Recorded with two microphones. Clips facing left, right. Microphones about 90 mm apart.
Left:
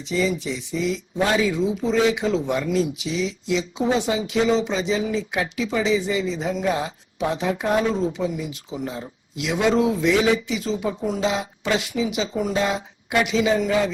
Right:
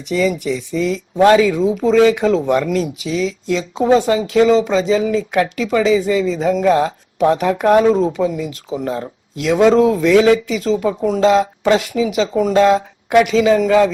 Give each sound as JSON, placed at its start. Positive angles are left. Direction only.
{"t": 0.0, "sound": "speech", "side_deg": -75}
{"t": 1.1, "sound": "speech", "side_deg": -65}
{"t": 1.7, "sound": "speech", "side_deg": -75}
{"t": 3.5, "sound": "speech", "side_deg": -55}
{"t": 4.7, "sound": "speech", "side_deg": -90}
{"t": 8.8, "sound": "speech", "side_deg": -65}
{"t": 11.7, "sound": "speech", "side_deg": -85}
{"t": 12.3, "sound": "speech", "side_deg": -75}